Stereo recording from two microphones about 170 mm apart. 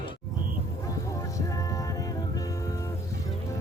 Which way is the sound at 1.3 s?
20° left (ahead or behind).